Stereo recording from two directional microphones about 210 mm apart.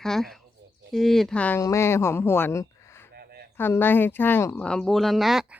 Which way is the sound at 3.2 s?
45° right (ahead or behind).